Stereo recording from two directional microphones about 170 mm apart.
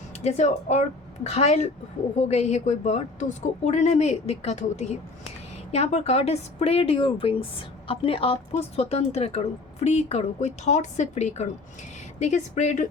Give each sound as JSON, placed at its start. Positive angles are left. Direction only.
{"t": 0.2, "sound": "a woman's voice", "side_deg": 40}